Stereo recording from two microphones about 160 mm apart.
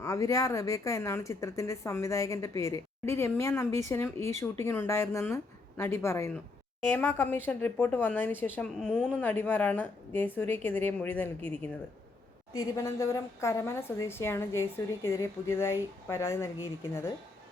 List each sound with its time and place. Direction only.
0.0 s a woman's voice: 20° left (ahead or behind)
12.7 s a woman's voice: 20° left (ahead or behind)